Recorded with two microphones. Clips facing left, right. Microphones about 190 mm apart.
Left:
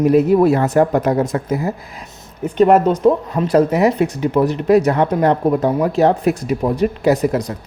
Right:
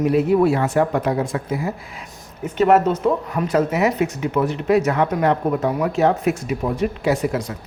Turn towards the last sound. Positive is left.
turn(degrees=40)  # may be behind; listen again after turning